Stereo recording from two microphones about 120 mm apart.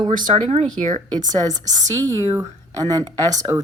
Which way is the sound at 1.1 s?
35° right (ahead or behind).